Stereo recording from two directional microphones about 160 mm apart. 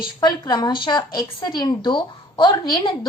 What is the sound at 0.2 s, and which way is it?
A woman's voice, 25° left (ahead or behind).